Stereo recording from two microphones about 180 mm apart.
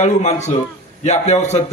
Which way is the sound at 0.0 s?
40° left (ahead or behind).